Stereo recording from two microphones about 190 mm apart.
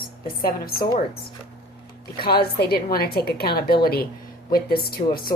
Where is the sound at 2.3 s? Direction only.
55° left (ahead or behind).